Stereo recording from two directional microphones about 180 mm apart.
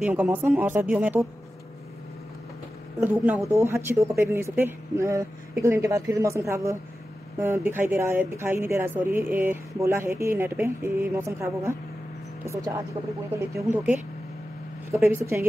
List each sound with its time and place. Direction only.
0.0 s speech: 10° right (ahead or behind)
3.0 s speech: 10° right (ahead or behind)
13.3 s speech: 10° right (ahead or behind)